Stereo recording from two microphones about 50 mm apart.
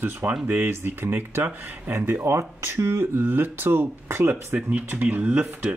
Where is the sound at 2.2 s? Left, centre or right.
Right.